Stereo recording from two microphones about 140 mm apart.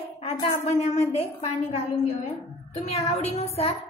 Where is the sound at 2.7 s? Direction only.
50° left (ahead or behind).